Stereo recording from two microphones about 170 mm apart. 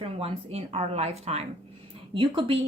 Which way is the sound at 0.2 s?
35° right (ahead or behind).